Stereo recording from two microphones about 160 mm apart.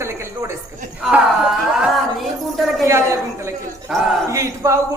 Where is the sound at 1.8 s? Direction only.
Centre (ahead or behind).